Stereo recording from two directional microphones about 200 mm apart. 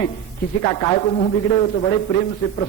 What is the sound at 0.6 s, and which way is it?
A man's voice, 25° left (ahead or behind).